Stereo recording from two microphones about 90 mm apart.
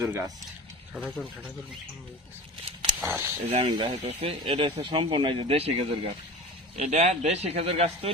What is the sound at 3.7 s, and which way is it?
Speech, 70° right (ahead or behind).